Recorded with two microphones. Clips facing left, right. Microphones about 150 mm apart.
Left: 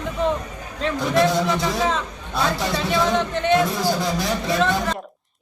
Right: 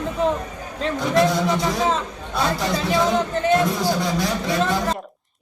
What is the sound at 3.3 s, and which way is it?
Speech, 35° right (ahead or behind).